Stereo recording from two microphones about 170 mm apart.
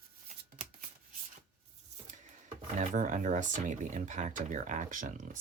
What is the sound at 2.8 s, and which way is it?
Speech, 50° right (ahead or behind).